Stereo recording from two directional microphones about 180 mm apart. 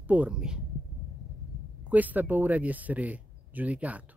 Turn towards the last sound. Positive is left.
turn(degrees=-10)  # may be behind; listen again after turning